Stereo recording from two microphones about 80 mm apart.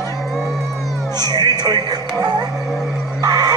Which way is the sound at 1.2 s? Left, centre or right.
Right.